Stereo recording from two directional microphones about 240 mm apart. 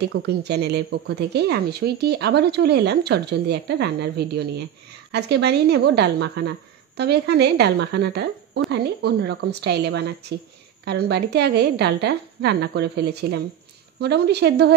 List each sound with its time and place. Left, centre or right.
0.1 s speech: right